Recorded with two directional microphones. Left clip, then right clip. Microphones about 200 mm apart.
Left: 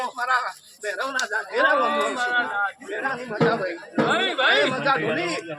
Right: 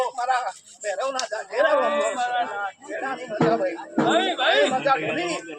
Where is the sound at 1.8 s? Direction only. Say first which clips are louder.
Even; 15° right (ahead or behind).